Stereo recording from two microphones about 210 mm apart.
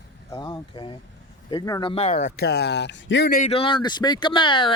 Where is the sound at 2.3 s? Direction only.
50° left (ahead or behind).